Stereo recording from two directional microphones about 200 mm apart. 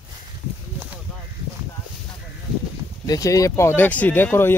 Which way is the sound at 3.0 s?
15° left (ahead or behind).